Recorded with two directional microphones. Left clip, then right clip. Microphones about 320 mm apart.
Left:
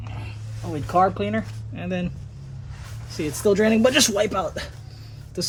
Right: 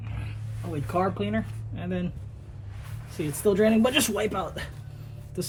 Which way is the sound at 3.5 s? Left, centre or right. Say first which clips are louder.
Left 4 dB; left.